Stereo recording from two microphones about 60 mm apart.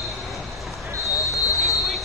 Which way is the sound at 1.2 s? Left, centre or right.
Left.